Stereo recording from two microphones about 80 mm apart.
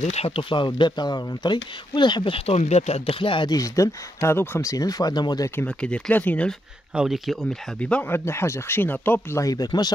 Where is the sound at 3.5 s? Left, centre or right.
Left.